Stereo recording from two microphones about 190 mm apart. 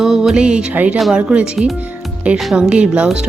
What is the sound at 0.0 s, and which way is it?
Speech, centre (ahead or behind).